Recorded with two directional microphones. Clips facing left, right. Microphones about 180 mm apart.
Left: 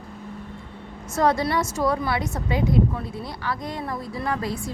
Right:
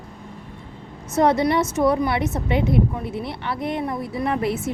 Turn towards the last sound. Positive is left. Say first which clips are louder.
# right 4 dB
turn(degrees=-20)  # may be behind; listen again after turning